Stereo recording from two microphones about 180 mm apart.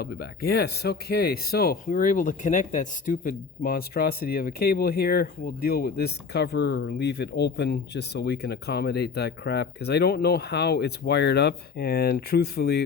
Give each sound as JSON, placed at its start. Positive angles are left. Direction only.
{"t": 0.0, "sound": "speech", "side_deg": 60}